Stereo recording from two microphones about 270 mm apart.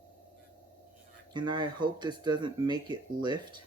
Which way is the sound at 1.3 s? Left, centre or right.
Centre.